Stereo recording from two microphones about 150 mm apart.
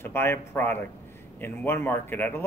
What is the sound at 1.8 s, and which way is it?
Speech, 15° left (ahead or behind).